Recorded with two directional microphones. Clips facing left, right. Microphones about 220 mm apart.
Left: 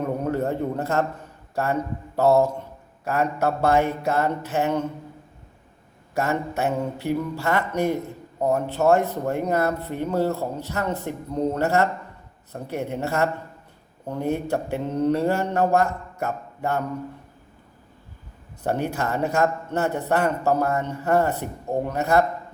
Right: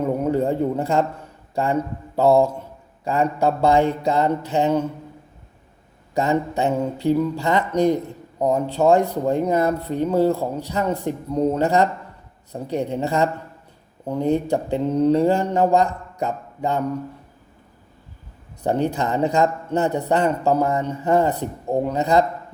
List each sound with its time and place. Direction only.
0.0 s a sound: 15° right (ahead or behind)
1.5 s a man's voice: 15° right (ahead or behind)
6.1 s a man's voice: 15° right (ahead or behind)
18.6 s a man's voice: 15° right (ahead or behind)